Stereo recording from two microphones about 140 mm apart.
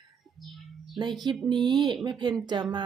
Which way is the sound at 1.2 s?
35° right (ahead or behind).